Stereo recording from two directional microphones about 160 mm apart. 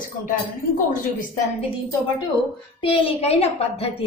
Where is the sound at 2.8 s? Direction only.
35° left (ahead or behind).